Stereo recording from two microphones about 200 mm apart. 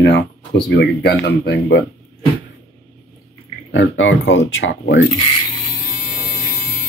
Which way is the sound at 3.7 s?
70° left (ahead or behind).